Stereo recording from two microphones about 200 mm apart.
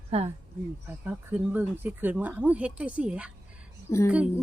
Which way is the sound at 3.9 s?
15° left (ahead or behind).